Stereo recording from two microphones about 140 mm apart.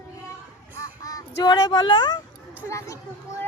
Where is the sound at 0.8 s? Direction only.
25° left (ahead or behind).